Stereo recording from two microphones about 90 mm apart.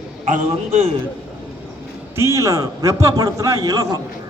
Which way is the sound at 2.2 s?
35° right (ahead or behind).